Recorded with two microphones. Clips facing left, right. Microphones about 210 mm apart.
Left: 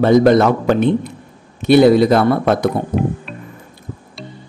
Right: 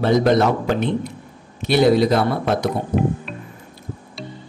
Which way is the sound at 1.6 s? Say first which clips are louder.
Left 6 dB; 55° left (ahead or behind).